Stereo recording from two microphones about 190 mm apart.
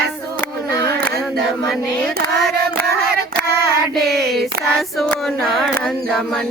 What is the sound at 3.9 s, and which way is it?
Child singing, centre (ahead or behind).